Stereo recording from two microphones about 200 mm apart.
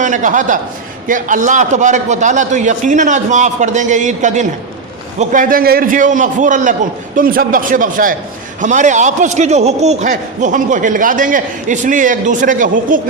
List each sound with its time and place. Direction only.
0.0 s a man's voice: 40° right (ahead or behind)